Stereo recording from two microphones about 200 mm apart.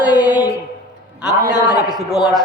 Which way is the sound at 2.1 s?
Centre (ahead or behind).